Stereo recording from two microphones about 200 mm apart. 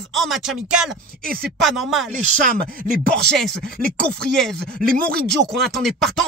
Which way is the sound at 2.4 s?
45° right (ahead or behind).